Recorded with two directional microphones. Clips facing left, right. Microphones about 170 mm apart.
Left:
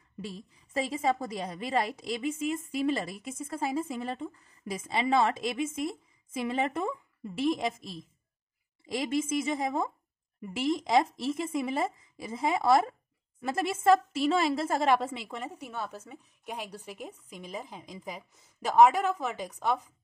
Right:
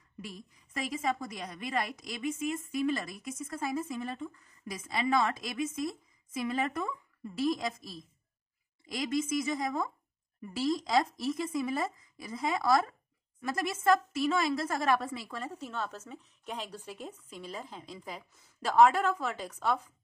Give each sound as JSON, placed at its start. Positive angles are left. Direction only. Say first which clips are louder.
{"t": 0.2, "sound": "a woman's voice", "louder": "left 4 dB", "side_deg": 30}